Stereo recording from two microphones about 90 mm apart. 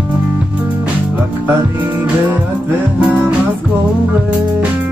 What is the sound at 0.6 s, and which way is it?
Music, 20° right (ahead or behind).